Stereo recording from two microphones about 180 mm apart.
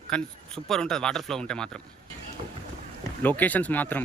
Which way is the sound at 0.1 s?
5° left (ahead or behind).